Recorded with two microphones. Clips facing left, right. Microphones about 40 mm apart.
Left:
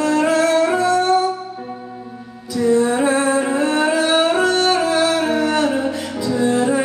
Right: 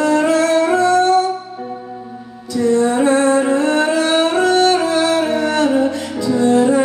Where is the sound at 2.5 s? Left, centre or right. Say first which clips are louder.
Right 1 dB; centre.